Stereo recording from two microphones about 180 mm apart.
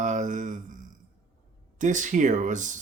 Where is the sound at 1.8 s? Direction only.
45° right (ahead or behind).